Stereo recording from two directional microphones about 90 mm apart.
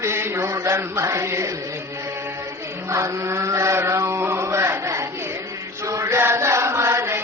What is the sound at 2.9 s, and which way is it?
Chant, 35° right (ahead or behind).